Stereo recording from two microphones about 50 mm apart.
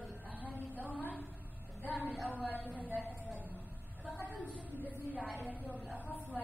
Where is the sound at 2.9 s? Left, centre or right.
Right.